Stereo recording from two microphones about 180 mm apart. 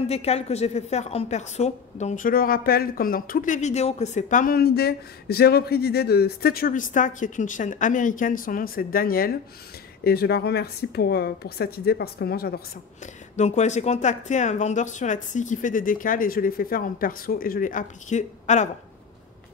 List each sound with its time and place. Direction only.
0.1 s a woman's voice: 35° left (ahead or behind); by 13.1 s 60° left (ahead or behind)
13.4 s a woman's voice: 40° left (ahead or behind)